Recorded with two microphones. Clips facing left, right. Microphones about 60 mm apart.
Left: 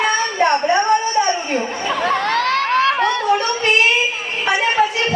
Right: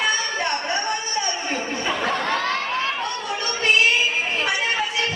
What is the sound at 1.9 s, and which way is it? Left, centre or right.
Chatter, left.